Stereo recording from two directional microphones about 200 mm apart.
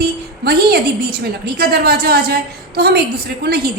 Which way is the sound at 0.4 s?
50° right (ahead or behind).